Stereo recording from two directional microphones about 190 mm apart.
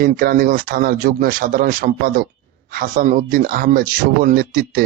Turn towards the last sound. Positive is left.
turn(degrees=-50)  # may be behind; listen again after turning